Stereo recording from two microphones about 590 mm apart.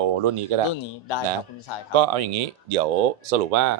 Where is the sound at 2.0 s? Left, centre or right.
Right.